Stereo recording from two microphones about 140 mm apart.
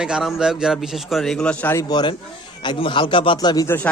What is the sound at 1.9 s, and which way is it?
A man's voice, 30° left (ahead or behind).